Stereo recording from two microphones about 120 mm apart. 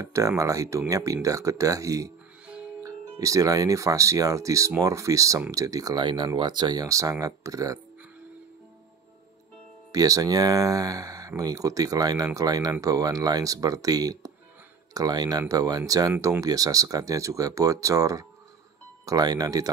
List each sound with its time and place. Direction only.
0.0 s speech: 25° right (ahead or behind)
2.4 s music: 10° right (ahead or behind)
2.8 s speech: 25° right (ahead or behind)
9.9 s speech: 30° right (ahead or behind)